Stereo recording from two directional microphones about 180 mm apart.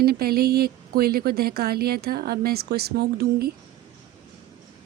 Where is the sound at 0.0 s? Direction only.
60° right (ahead or behind).